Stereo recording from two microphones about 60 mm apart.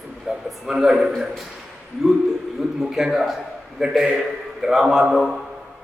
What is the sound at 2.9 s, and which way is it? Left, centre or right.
A man's voice, centre.